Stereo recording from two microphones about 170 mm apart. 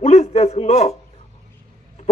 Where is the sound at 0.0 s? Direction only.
40° left (ahead or behind).